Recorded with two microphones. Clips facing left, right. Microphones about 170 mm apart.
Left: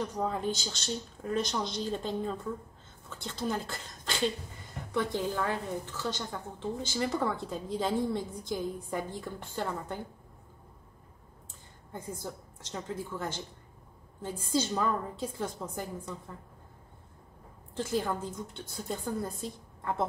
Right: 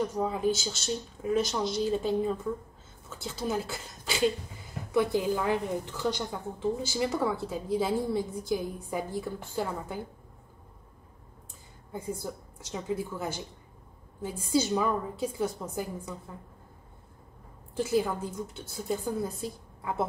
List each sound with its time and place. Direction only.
0.0 s a woman's voice: 10° right (ahead or behind)
11.9 s a woman's voice: 10° right (ahead or behind)
17.7 s a woman's voice: 10° right (ahead or behind)